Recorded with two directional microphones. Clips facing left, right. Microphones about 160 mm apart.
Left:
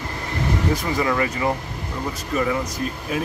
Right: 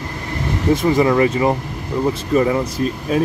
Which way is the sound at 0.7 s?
25° right (ahead or behind).